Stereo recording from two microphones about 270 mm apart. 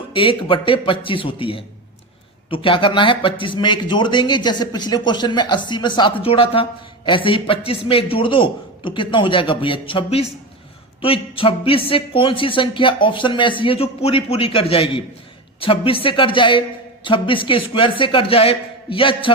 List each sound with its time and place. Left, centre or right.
0.1 s speech: centre